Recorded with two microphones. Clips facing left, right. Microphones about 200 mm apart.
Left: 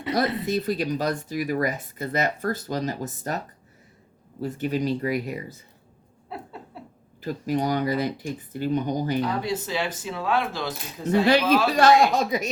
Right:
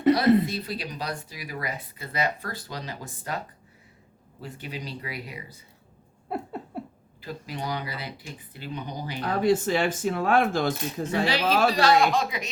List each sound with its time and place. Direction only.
0.4 s speech: 45° left (ahead or behind)
4.4 s speech: 45° left (ahead or behind)
6.2 s a sound: 50° right (ahead or behind)
7.2 s speech: 45° left (ahead or behind)
9.2 s speech: 50° right (ahead or behind)
11.3 s speech: 50° left (ahead or behind)